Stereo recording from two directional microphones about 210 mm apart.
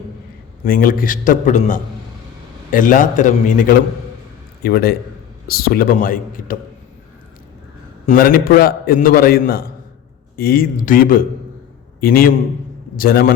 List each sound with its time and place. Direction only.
0.6 s a man's voice: 40° left (ahead or behind)
8.0 s a man's voice: 40° left (ahead or behind)